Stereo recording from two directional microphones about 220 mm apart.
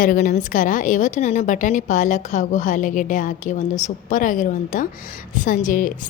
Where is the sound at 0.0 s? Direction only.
40° left (ahead or behind).